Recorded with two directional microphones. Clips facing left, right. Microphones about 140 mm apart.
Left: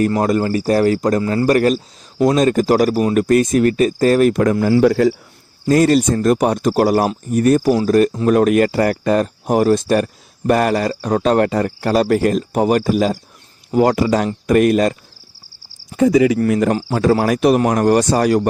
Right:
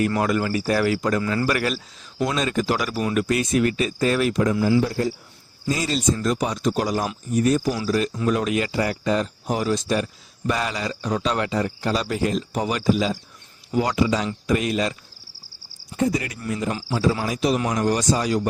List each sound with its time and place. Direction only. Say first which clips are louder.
0.0 s a man's voice: left 6 dB; 40° left (ahead or behind); by 4.8 s 55° left (ahead or behind)
4.8 s speech: left 10 dB; 80° left
5.6 s speech: left 10 dB; 55° left (ahead or behind)
16.4 s speech: left 11 dB; 70° left (ahead or behind)
16.7 s speech: left 7 dB; 55° left (ahead or behind)